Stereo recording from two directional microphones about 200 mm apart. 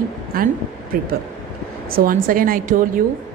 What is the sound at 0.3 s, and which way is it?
Speech, 45° right (ahead or behind).